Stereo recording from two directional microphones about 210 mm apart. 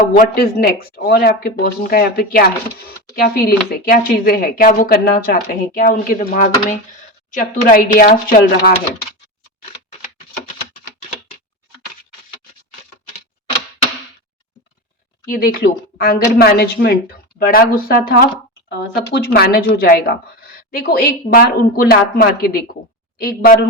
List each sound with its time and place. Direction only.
0.0 s speech: 45° left (ahead or behind)
15.3 s speech: 45° left (ahead or behind)